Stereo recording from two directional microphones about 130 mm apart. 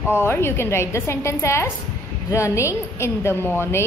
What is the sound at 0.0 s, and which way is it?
A woman's voice, 20° left (ahead or behind).